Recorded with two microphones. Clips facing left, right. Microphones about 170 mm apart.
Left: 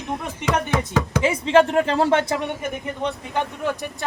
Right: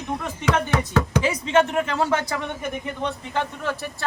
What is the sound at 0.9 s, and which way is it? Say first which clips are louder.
Speech: left 1 dB; 25° left (ahead or behind).